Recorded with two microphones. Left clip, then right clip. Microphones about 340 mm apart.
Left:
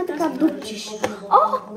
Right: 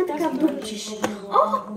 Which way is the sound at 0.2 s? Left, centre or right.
Centre.